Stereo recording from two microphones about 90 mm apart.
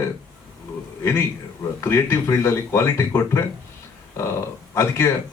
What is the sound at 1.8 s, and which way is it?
Speech, 30° left (ahead or behind).